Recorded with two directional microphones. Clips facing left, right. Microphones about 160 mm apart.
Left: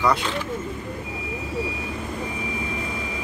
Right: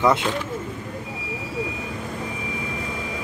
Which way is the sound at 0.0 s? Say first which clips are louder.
Right 3 dB; 20° right (ahead or behind).